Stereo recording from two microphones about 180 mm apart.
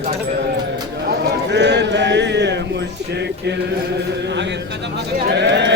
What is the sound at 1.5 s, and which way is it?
Music, 70° right (ahead or behind).